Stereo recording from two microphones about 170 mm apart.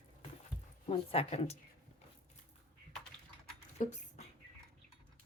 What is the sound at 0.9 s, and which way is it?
Speech, 35° left (ahead or behind).